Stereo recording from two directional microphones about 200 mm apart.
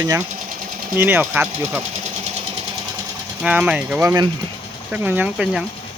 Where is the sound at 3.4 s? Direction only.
5° right (ahead or behind).